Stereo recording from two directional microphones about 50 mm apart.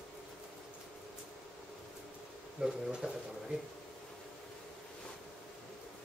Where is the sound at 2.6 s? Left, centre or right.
Centre.